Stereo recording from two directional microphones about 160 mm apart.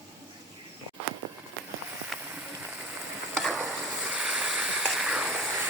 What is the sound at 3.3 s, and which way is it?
Stir, centre (ahead or behind).